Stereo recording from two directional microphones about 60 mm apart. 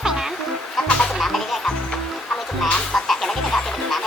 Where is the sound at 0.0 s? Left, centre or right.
Centre.